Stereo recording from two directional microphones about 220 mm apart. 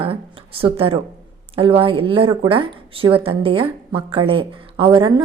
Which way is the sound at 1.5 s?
25° right (ahead or behind).